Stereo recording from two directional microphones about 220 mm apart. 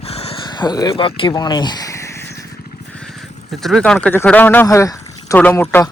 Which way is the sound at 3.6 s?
Centre (ahead or behind).